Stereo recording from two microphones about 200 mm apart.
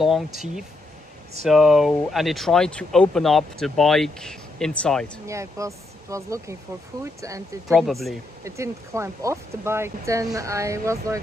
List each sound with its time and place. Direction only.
1.4 s speech: centre (ahead or behind)
5.2 s speech: 15° right (ahead or behind)
7.6 s speech: centre (ahead or behind)
8.5 s speech: 15° right (ahead or behind)